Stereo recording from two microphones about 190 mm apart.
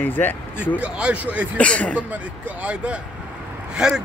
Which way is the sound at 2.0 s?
10° right (ahead or behind).